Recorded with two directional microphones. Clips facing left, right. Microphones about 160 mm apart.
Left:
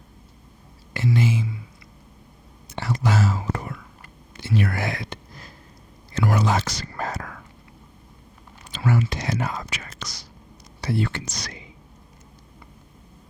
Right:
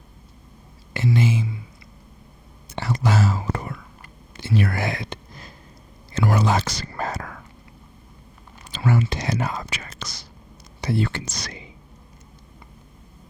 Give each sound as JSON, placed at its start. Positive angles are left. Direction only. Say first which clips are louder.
{"t": 0.9, "sound": "speech", "louder": "right 1 dB", "side_deg": -25}
{"t": 2.6, "sound": "whispering", "louder": "right 1 dB", "side_deg": -30}
{"t": 8.7, "sound": "speech", "louder": "right 1 dB", "side_deg": -30}